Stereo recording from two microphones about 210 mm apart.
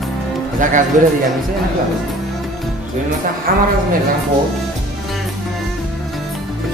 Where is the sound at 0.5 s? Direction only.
40° right (ahead or behind).